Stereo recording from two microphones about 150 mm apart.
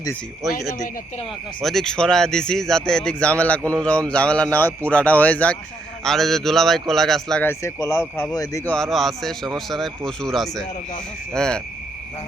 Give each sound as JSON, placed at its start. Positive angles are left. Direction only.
{"t": 1.6, "sound": "speech", "side_deg": 5}
{"t": 7.4, "sound": "speech", "side_deg": 20}
{"t": 8.6, "sound": "speech", "side_deg": 5}